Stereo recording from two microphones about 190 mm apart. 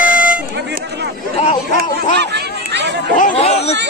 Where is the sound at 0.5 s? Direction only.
65° right (ahead or behind).